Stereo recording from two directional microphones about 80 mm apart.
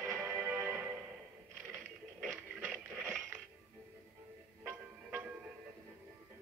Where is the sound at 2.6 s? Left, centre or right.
Right.